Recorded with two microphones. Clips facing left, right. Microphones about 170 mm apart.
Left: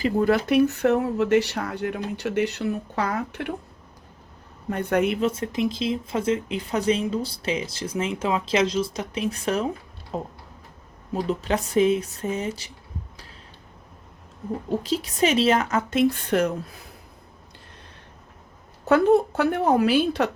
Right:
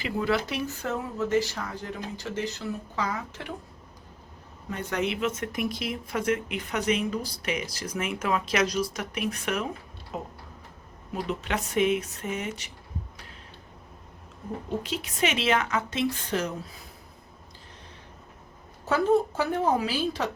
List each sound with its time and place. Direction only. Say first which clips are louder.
0.0 s speech: left 6 dB; 45° left (ahead or behind)
4.7 s a woman's voice: left 7 dB; 55° left (ahead or behind)
5.2 s speech: left 5 dB; 30° left (ahead or behind)
14.8 s a woman's voice: left 7 dB; 35° left (ahead or behind); by 16.8 s 60° left (ahead or behind)
18.9 s speech: left 5 dB; 60° left (ahead or behind)